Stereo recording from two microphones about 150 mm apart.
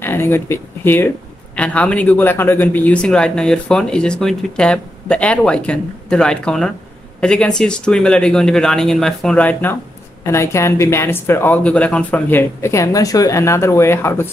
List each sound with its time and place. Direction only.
0.0 s speech: 15° left (ahead or behind)